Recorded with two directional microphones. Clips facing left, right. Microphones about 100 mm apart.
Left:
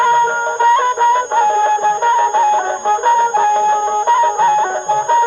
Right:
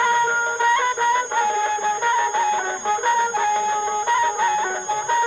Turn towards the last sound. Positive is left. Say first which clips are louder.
# left 8 dB
turn(degrees=45)  # may be behind; listen again after turning